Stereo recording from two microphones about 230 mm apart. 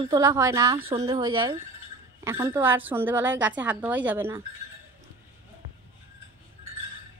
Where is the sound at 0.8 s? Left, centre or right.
Right; by 4.4 s centre.